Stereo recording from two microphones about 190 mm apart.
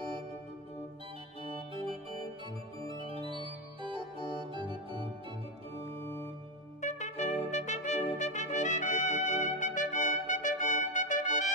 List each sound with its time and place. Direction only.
2.9 s organ: 25° right (ahead or behind)
6.8 s brass instrument: 40° left (ahead or behind)